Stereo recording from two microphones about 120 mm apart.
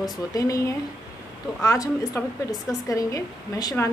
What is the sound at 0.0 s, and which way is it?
A woman's voice, 30° left (ahead or behind).